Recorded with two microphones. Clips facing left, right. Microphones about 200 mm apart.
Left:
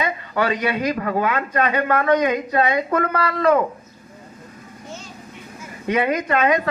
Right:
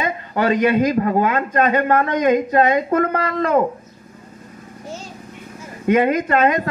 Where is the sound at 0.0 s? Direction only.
45° right (ahead or behind).